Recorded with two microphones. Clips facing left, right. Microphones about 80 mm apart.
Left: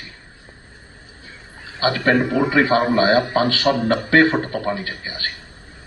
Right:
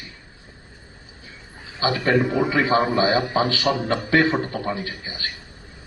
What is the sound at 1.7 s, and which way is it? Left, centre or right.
A man's voice, left.